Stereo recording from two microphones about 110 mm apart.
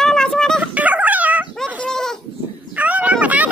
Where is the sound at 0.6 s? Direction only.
15° right (ahead or behind).